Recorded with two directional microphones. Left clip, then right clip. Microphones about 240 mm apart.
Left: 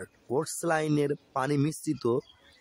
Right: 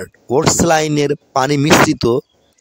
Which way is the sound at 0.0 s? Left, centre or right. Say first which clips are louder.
Right 16 dB; right.